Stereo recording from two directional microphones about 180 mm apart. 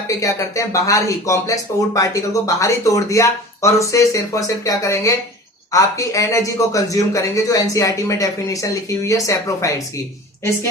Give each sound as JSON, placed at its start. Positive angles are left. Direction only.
{"t": 0.1, "sound": "speech", "side_deg": 20}